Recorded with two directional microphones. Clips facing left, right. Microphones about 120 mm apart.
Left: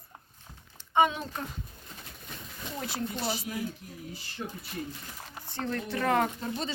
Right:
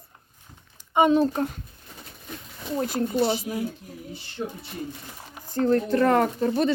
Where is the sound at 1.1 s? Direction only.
40° right (ahead or behind).